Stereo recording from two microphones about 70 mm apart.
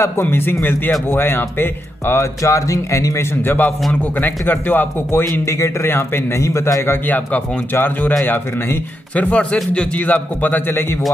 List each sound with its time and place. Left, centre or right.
0.2 s a man's voice: left
2.4 s speech: left
3.4 s speech: left
5.4 s a man's voice: left
7.1 s speech: left
9.1 s speech: centre